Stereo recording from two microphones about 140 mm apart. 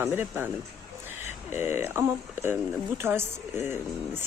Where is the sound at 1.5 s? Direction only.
15° right (ahead or behind).